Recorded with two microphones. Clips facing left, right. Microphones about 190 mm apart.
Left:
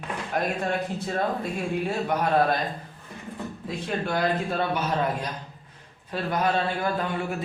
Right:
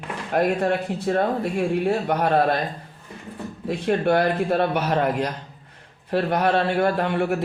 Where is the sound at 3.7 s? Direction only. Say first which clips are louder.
Right 9 dB; 65° right (ahead or behind).